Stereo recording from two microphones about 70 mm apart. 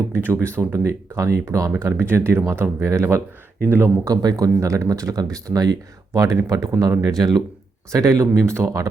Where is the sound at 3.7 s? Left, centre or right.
Right.